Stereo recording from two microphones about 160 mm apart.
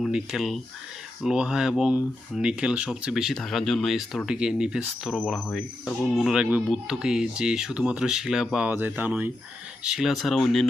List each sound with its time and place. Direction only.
0.0 s speech: centre (ahead or behind)